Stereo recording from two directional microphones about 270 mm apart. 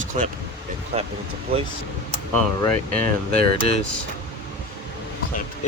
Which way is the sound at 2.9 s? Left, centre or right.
Right.